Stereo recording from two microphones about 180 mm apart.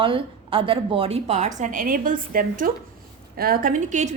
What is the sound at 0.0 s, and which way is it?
A woman's voice, 30° right (ahead or behind).